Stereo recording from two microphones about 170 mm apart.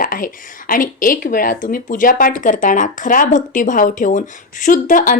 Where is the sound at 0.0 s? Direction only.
55° left (ahead or behind).